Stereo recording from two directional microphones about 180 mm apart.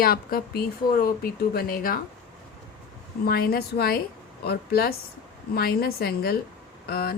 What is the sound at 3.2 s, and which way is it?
Speech, 55° left (ahead or behind).